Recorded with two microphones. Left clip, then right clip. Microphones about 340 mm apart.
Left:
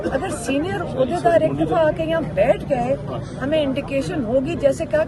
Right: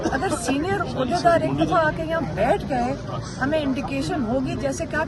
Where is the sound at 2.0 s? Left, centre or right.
Right.